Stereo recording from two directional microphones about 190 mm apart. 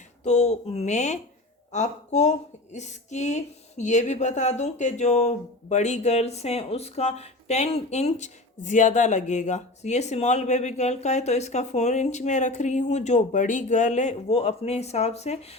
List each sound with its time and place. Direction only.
0.3 s speech: 35° left (ahead or behind)